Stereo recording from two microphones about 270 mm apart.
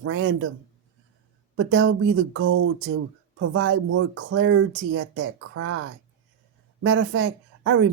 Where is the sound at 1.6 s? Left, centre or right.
Right.